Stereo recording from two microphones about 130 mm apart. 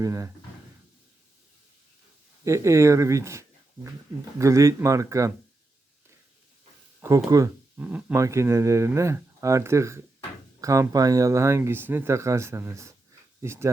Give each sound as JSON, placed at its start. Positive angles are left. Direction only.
{"t": 0.0, "sound": "speech", "side_deg": -25}
{"t": 2.4, "sound": "speech", "side_deg": -25}
{"t": 7.3, "sound": "speech", "side_deg": -25}